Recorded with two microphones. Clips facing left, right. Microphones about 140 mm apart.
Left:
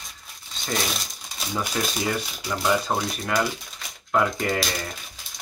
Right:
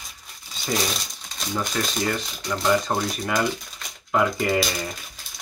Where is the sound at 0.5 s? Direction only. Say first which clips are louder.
Right 2 dB; centre (ahead or behind).